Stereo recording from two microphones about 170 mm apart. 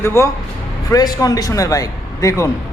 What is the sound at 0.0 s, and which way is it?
A man's voice, 15° left (ahead or behind).